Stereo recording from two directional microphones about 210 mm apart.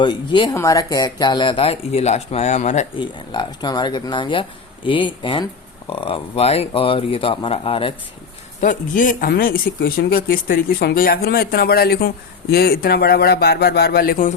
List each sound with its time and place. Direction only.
0.0 s speech: 20° left (ahead or behind)
3.0 s speech: 20° left (ahead or behind)
8.6 s speech: 40° left (ahead or behind)